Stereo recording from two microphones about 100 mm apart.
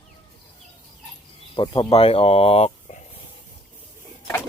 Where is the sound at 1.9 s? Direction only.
75° left (ahead or behind); by 2.9 s 90° left.